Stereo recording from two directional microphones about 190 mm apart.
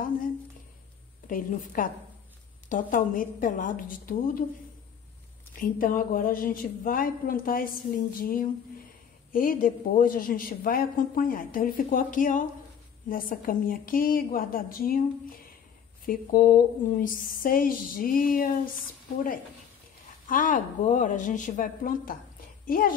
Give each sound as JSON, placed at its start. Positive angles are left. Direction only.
{"t": 1.2, "sound": "a woman's voice", "side_deg": 45}
{"t": 5.6, "sound": "a woman's voice", "side_deg": 45}
{"t": 16.1, "sound": "a woman's voice", "side_deg": 50}
{"t": 20.2, "sound": "a woman's voice", "side_deg": 45}